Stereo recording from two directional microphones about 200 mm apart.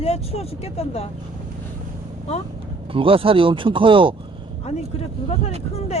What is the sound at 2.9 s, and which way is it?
Speech, 25° right (ahead or behind).